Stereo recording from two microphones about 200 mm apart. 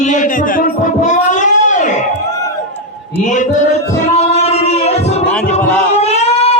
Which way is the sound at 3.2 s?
40° left (ahead or behind).